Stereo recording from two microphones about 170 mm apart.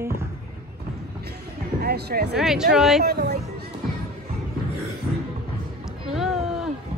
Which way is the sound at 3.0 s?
70° right (ahead or behind).